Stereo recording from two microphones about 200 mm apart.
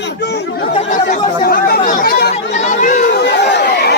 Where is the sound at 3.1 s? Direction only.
55° left (ahead or behind).